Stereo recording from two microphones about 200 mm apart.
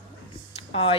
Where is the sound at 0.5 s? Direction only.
30° left (ahead or behind).